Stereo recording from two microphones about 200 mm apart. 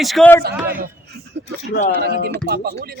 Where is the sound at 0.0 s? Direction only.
Centre (ahead or behind).